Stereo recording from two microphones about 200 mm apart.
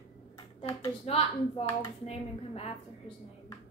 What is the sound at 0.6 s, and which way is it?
Speech, 25° left (ahead or behind).